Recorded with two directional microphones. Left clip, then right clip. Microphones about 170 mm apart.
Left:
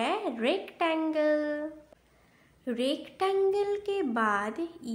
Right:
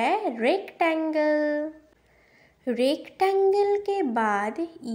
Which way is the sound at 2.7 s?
25° right (ahead or behind).